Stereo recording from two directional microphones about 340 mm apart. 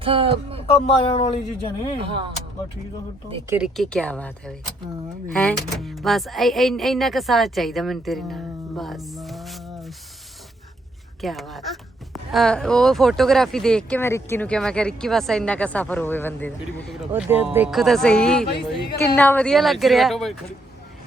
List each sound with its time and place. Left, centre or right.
0.0 s speech: centre
0.7 s speech: centre
2.0 s speech: centre
3.6 s speech: centre
11.2 s speech: centre
18.4 s speech: left
19.1 s speech: centre